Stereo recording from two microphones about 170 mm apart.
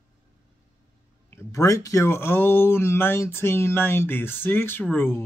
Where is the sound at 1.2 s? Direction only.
15° left (ahead or behind).